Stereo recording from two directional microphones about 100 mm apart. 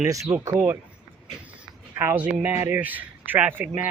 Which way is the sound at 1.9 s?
25° right (ahead or behind).